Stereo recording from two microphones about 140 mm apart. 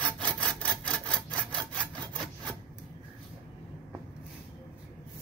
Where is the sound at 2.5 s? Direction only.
15° right (ahead or behind).